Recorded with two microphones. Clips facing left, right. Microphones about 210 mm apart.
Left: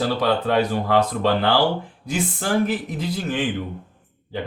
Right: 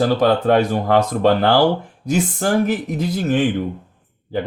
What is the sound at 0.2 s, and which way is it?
Speech, 45° right (ahead or behind).